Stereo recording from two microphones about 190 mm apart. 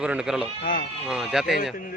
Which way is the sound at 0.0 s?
5° right (ahead or behind).